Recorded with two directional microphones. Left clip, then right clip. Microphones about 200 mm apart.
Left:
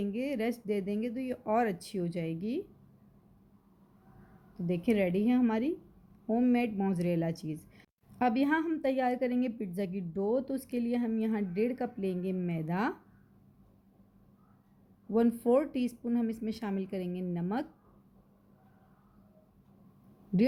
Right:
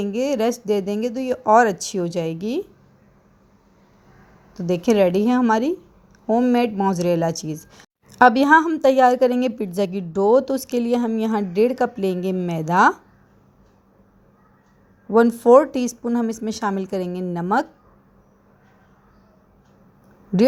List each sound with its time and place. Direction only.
0.0 s speech: 25° right (ahead or behind)
4.5 s speech: 25° right (ahead or behind)
15.1 s speech: 25° right (ahead or behind)